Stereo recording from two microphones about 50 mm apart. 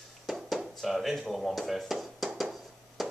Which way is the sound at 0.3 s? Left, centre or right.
Centre.